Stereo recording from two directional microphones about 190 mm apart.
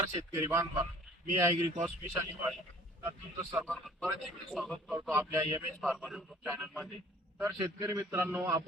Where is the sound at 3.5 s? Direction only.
Centre (ahead or behind).